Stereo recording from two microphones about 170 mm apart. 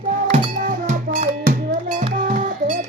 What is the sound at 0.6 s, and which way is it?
Music, 50° right (ahead or behind).